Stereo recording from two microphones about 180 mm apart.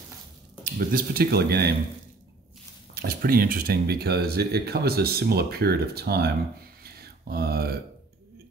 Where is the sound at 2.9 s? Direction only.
55° right (ahead or behind).